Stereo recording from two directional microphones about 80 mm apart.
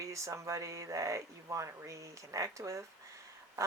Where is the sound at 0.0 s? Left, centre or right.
Right.